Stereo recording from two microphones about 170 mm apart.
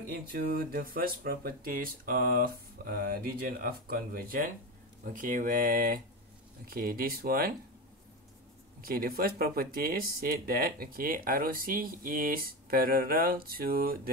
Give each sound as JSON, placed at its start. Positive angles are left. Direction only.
{"t": 0.1, "sound": "speech", "side_deg": -60}
{"t": 8.8, "sound": "speech", "side_deg": -60}